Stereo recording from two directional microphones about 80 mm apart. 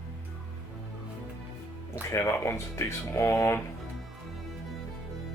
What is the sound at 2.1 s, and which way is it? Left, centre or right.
Speech, left.